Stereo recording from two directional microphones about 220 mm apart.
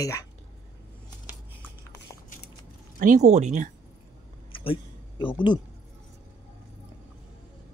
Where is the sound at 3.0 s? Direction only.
35° right (ahead or behind).